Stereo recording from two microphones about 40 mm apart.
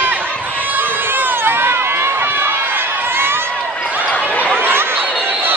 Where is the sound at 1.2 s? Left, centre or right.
Right.